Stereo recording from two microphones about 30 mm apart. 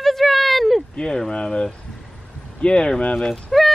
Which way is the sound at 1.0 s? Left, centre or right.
Left.